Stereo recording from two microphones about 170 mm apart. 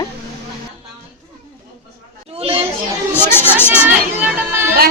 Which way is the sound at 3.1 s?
10° left (ahead or behind).